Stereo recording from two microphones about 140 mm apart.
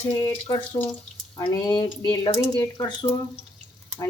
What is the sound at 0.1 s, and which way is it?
Speech, 25° left (ahead or behind).